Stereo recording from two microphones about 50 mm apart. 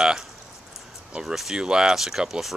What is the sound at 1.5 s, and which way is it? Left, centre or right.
Speech, centre.